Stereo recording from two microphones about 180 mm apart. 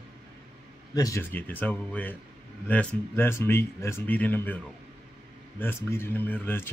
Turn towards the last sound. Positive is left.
turn(degrees=10)  # may be behind; listen again after turning